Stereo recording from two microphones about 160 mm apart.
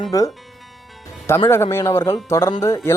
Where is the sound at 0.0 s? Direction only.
20° left (ahead or behind).